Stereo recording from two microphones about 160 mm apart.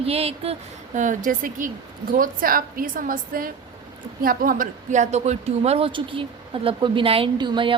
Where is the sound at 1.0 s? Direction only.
55° right (ahead or behind).